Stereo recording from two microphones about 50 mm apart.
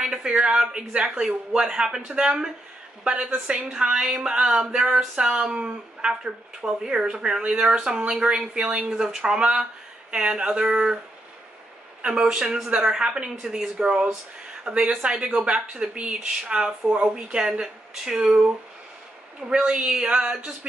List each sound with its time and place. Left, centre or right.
0.0 s speech: centre
8.2 s speech: right
8.8 s speech: centre
10.1 s speech: right
12.0 s speech: centre
19.4 s speech: centre
19.8 s speech: right